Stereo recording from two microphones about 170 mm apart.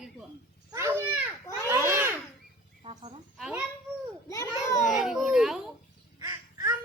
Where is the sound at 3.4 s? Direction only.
5° right (ahead or behind).